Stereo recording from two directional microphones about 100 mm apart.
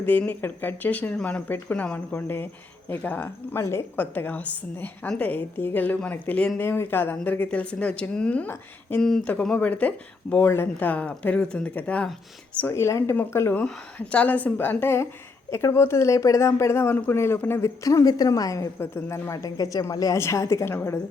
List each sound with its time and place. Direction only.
0.0 s a woman's voice: 15° left (ahead or behind)
9.0 s a woman's voice: 5° left (ahead or behind)
12.6 s a woman's voice: 30° left (ahead or behind)